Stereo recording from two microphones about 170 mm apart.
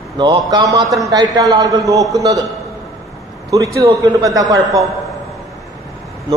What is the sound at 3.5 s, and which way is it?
A man's voice, 20° right (ahead or behind).